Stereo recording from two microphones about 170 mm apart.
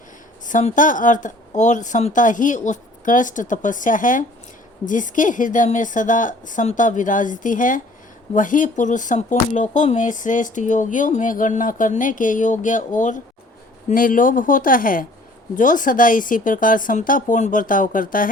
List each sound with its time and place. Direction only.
0.4 s speech: 50° left (ahead or behind)